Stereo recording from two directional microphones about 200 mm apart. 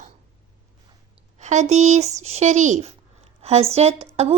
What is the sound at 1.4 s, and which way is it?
Speech, 35° right (ahead or behind).